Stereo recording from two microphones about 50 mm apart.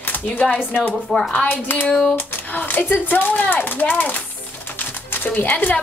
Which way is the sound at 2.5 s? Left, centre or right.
Left.